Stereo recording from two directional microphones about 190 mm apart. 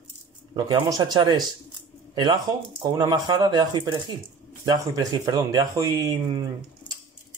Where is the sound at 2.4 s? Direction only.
20° right (ahead or behind).